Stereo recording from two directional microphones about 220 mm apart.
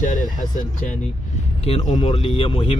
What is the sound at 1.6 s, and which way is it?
Speech, 25° left (ahead or behind).